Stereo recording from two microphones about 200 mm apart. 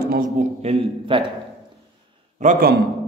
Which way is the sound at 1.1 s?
25° right (ahead or behind).